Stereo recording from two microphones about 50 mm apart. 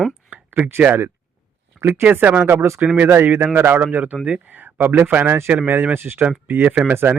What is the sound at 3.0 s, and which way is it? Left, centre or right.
Speech, right.